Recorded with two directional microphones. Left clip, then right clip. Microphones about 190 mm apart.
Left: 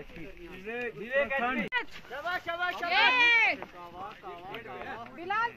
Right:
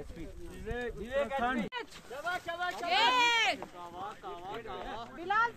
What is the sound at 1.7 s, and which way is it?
Vehicle, 70° right (ahead or behind).